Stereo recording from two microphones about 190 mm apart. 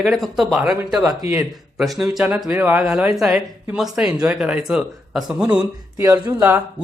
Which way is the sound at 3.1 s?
5° right (ahead or behind).